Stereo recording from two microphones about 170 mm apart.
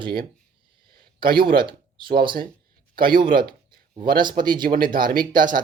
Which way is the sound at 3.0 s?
60° right (ahead or behind).